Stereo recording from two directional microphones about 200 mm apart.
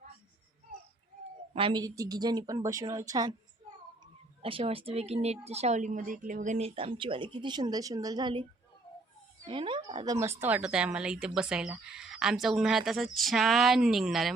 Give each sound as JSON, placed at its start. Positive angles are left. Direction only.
{"t": 1.5, "sound": "speech", "side_deg": -25}
{"t": 4.4, "sound": "speech", "side_deg": -25}
{"t": 9.5, "sound": "speech", "side_deg": -25}